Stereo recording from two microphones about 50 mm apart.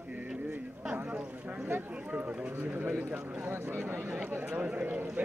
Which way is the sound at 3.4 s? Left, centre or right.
Right.